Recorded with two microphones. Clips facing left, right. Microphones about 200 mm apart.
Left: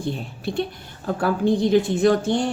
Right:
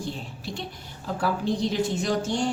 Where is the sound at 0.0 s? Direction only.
55° left (ahead or behind).